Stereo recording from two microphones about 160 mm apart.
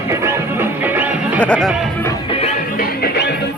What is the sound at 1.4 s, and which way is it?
Speech, 5° left (ahead or behind).